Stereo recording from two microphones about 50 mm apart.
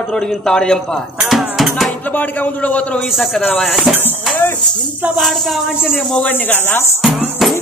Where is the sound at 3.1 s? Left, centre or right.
Centre.